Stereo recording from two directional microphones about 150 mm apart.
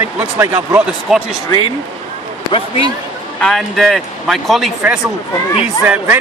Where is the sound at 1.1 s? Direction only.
5° right (ahead or behind).